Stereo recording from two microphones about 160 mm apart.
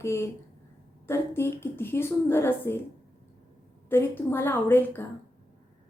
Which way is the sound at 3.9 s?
15° left (ahead or behind).